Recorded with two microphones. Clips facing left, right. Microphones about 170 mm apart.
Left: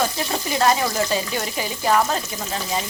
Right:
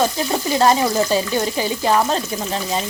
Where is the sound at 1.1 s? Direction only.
35° right (ahead or behind).